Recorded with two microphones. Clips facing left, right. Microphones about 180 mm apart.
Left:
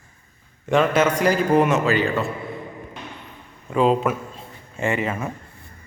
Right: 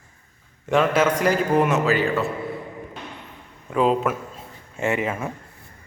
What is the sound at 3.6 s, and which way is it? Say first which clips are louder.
Speech: left 1 dB; centre (ahead or behind).